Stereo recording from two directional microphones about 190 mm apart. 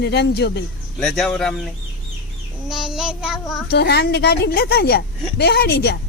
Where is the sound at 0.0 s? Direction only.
60° left (ahead or behind).